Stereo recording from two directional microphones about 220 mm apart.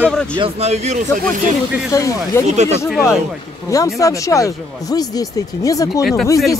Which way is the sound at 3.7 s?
15° left (ahead or behind).